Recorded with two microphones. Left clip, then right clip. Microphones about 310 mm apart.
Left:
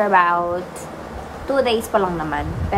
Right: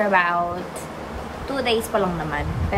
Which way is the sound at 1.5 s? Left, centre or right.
Centre.